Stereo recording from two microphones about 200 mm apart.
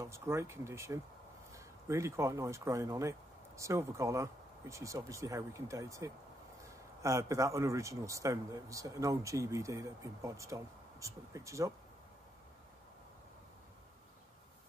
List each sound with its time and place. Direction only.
0.0 s speech: 15° right (ahead or behind)